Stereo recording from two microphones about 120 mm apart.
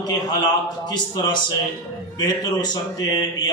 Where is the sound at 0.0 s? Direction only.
35° left (ahead or behind).